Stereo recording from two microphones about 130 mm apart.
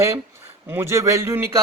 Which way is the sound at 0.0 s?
20° right (ahead or behind).